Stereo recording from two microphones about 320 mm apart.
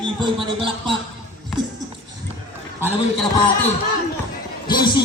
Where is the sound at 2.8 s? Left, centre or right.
Centre.